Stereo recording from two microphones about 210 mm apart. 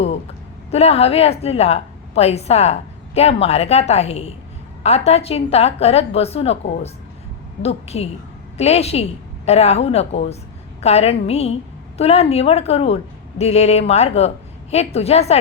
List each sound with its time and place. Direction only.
0.7 s a woman's voice: 30° left (ahead or behind)